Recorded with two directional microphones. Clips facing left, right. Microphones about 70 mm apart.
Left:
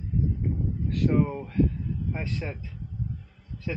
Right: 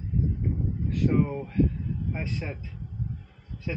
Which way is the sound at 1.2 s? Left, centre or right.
Centre.